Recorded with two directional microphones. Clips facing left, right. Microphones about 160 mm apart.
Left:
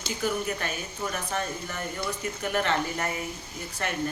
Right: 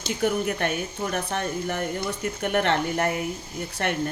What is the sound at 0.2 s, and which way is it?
Speech, 60° right (ahead or behind).